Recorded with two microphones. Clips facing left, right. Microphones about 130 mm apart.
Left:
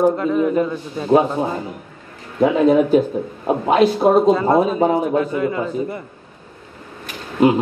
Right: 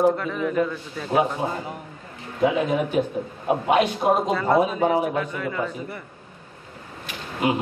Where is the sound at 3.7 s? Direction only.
35° left (ahead or behind).